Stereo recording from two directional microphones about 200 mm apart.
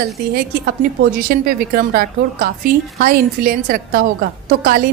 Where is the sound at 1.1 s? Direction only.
45° right (ahead or behind).